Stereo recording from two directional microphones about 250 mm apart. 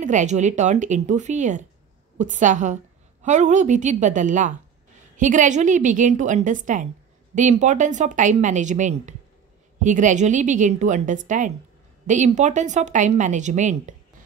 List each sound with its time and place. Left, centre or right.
0.0 s a woman's voice: right